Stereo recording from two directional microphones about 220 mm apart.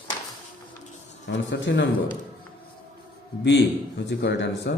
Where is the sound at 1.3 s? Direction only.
55° left (ahead or behind).